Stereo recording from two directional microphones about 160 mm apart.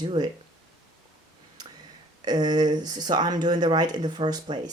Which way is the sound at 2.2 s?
25° right (ahead or behind).